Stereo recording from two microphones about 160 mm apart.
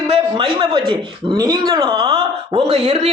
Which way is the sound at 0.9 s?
30° right (ahead or behind).